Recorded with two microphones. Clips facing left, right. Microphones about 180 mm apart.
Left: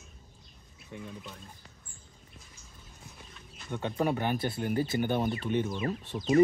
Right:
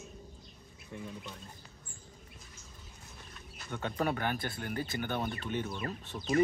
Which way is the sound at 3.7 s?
10° left (ahead or behind).